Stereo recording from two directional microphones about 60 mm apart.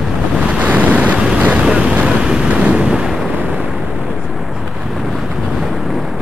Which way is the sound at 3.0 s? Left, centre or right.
Centre.